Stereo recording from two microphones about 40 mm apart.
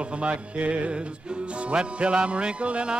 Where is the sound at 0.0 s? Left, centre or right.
Right.